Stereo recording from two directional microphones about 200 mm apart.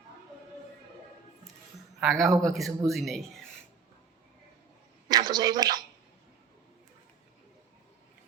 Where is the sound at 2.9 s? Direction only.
Centre (ahead or behind).